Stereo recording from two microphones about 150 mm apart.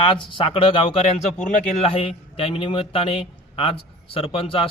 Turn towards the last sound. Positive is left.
turn(degrees=40)  # may be behind; listen again after turning